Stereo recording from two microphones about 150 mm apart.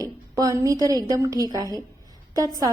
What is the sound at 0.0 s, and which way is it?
A woman's voice, 20° right (ahead or behind).